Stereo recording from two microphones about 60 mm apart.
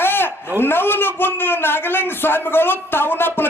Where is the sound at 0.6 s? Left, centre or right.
Left.